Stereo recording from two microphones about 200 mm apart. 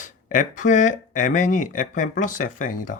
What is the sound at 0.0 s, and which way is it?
Speech, 40° left (ahead or behind).